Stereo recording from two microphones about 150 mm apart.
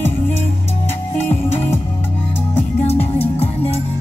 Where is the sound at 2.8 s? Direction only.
45° left (ahead or behind).